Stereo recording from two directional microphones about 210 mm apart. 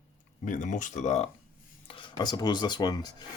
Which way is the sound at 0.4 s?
35° left (ahead or behind).